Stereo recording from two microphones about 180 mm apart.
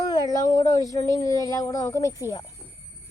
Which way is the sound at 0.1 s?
20° left (ahead or behind).